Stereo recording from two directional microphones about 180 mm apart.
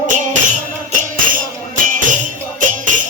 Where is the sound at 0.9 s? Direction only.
50° right (ahead or behind).